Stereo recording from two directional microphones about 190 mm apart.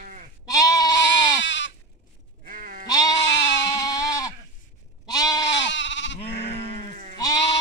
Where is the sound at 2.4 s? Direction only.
45° right (ahead or behind).